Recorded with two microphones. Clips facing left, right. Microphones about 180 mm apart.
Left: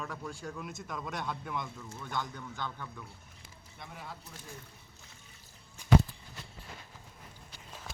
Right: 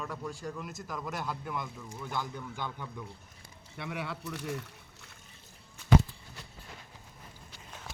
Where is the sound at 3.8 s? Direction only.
80° right.